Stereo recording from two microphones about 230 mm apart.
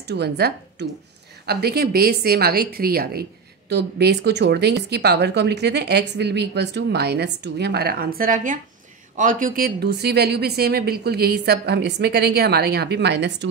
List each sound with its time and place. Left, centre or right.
0.1 s a woman's voice: right